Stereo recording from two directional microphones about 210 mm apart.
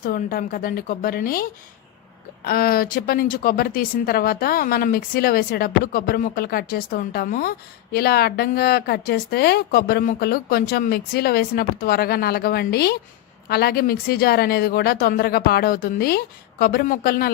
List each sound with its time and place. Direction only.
0.0 s speech: 40° left (ahead or behind)